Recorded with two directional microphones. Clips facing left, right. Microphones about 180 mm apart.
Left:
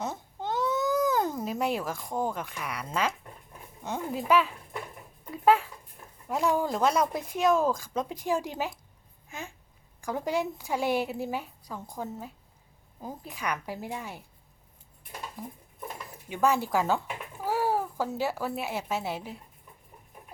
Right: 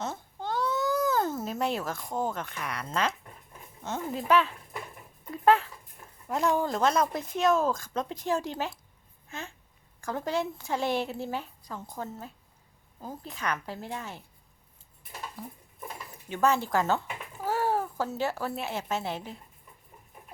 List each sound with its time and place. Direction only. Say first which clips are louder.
0.0 s babbling: left 1 dB; 15° left (ahead or behind)
1.5 s speech: left 1 dB; 10° left (ahead or behind)
10.0 s speech: left 1 dB; 15° left (ahead or behind)
16.3 s speech: even; 10° left (ahead or behind)